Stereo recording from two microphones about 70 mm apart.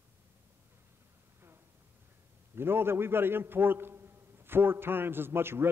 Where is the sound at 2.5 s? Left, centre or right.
Right.